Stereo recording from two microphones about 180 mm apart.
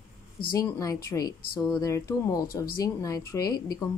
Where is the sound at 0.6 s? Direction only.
20° left (ahead or behind).